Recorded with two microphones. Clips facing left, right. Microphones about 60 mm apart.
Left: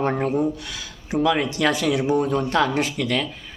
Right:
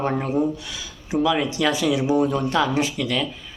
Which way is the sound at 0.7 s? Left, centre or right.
Left.